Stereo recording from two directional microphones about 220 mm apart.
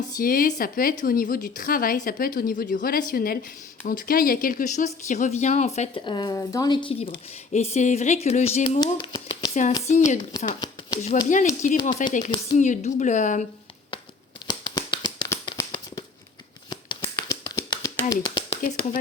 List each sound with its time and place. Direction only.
0.2 s a woman's voice: 40° left (ahead or behind)
8.8 s a sound: 20° left (ahead or behind)
9.9 s a woman's voice: 35° left (ahead or behind)
10.3 s speech: 20° left (ahead or behind)
11.1 s a woman's voice: 35° left (ahead or behind)
14.4 s a sound: 20° left (ahead or behind)